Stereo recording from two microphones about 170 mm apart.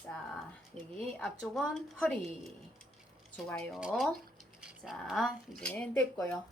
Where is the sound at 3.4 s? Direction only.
Centre (ahead or behind).